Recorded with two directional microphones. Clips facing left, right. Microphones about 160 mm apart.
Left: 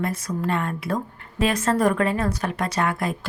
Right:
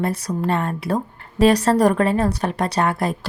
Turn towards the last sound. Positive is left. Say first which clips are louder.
# right 4 dB
turn(degrees=-35)  # may be behind; listen again after turning